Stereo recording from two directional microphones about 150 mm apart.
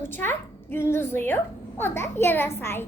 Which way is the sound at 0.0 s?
15° left (ahead or behind).